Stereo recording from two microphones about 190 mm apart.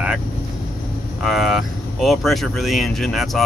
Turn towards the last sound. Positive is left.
turn(degrees=0)  # may be behind; listen again after turning